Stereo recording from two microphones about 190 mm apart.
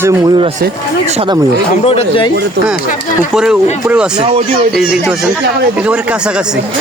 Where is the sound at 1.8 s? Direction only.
30° left (ahead or behind).